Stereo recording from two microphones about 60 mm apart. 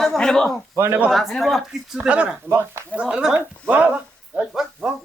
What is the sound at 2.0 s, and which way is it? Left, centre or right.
A man's voice, right.